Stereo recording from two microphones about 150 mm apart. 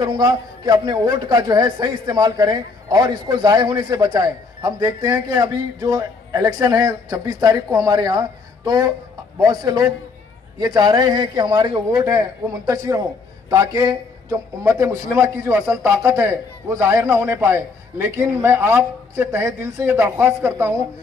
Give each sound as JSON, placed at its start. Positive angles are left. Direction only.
{"t": 0.0, "sound": "a man's voice", "side_deg": -25}